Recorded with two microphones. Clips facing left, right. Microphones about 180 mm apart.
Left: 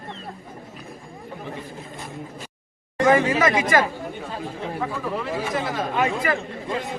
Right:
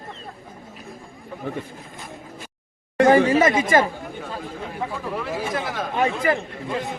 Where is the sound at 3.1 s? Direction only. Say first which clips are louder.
Right 2 dB; 30° right (ahead or behind).